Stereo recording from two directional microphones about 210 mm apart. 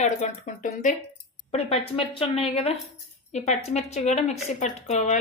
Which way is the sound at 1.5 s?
30° left (ahead or behind).